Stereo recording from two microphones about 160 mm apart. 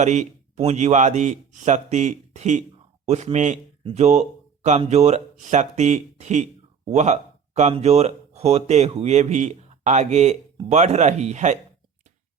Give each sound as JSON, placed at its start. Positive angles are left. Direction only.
{"t": 0.0, "sound": "speech", "side_deg": -45}